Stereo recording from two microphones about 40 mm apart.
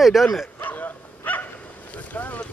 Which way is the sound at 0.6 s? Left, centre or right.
Left.